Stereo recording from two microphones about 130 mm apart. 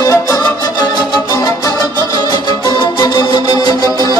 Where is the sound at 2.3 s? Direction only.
35° left (ahead or behind).